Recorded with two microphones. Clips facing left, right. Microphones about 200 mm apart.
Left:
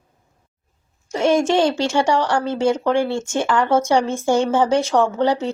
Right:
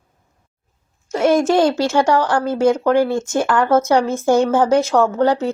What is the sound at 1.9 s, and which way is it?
Speech, 15° left (ahead or behind).